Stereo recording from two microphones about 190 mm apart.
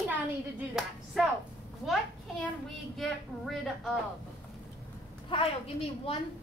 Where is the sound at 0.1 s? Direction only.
5° right (ahead or behind).